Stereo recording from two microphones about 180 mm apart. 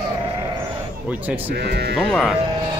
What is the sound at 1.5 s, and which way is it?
Speech, 70° right (ahead or behind).